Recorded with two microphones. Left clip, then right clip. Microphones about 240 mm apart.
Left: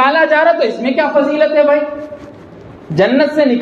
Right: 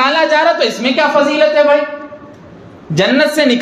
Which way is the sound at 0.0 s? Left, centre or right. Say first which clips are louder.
Left 1 dB; right.